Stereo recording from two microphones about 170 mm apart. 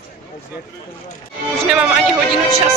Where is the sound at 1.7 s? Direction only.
5° right (ahead or behind).